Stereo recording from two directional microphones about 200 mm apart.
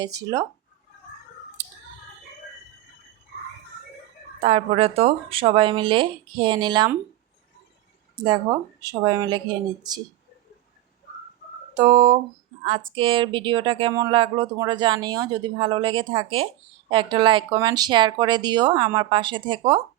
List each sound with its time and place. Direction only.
0.0 s speech: 15° right (ahead or behind)
4.4 s speech: 30° right (ahead or behind)
8.1 s speech: 20° right (ahead or behind)
11.7 s a sound: 25° right (ahead or behind)
12.6 s speech: 25° right (ahead or behind)